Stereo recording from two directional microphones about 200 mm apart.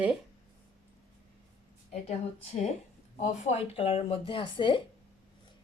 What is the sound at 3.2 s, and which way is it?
Speech, 35° left (ahead or behind).